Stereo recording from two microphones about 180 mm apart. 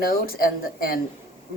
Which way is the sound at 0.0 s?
55° left (ahead or behind).